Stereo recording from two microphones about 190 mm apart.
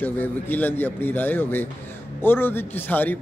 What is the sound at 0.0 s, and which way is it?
A man's voice, 10° left (ahead or behind).